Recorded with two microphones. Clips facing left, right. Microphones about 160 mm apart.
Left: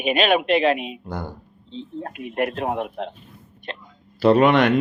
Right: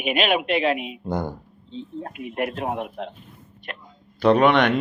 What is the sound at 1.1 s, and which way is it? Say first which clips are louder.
Speech: right 7 dB; 15° right (ahead or behind).